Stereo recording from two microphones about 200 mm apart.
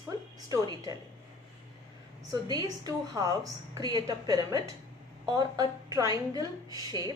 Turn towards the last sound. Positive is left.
turn(degrees=-20)  # may be behind; listen again after turning